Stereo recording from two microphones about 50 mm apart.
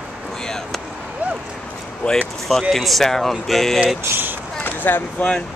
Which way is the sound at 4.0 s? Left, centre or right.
Right.